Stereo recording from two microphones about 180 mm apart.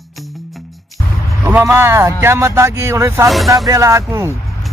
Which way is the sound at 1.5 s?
15° right (ahead or behind).